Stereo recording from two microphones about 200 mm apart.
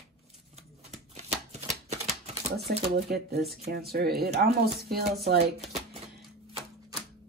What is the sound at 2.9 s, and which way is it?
Speech, 50° right (ahead or behind).